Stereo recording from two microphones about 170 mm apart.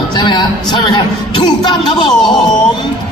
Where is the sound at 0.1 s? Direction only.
25° left (ahead or behind).